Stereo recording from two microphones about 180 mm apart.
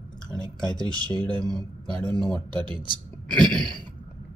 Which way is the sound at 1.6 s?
25° right (ahead or behind).